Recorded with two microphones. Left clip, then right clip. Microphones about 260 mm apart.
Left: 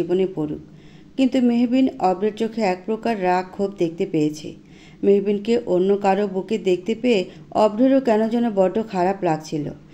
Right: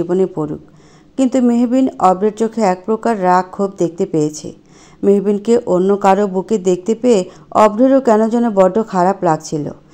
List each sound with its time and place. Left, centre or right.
0.1 s speech: right